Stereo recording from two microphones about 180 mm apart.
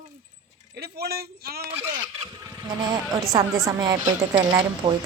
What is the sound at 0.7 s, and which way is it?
Speech, 60° right (ahead or behind).